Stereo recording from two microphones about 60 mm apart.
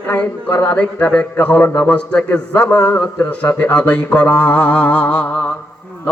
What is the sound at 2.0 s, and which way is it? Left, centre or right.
A man's voice, centre.